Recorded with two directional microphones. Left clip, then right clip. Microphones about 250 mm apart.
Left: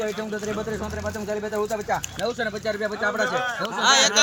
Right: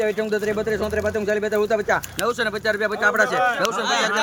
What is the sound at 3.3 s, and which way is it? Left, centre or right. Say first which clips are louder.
Speech: right 6 dB; right.